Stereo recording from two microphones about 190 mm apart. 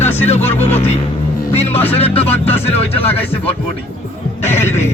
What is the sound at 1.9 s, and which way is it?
Speech, 30° left (ahead or behind).